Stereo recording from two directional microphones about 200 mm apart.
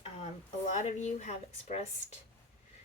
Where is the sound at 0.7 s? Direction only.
40° left (ahead or behind).